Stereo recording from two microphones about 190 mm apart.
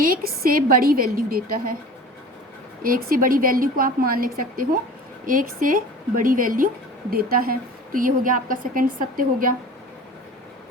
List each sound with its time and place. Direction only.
0.0 s a woman's voice: 50° right (ahead or behind)
2.8 s a woman's voice: 50° right (ahead or behind)